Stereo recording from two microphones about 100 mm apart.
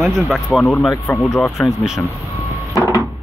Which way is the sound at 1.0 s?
25° left (ahead or behind).